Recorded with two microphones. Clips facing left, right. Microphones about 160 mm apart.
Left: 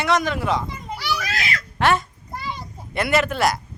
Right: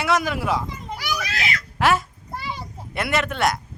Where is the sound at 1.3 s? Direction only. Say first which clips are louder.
Left 1 dB; 40° left (ahead or behind).